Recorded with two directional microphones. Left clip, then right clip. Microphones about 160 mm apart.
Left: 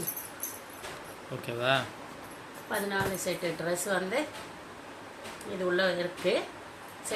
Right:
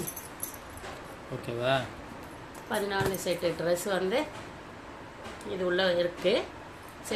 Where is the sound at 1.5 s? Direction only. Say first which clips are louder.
Even; 5° right (ahead or behind).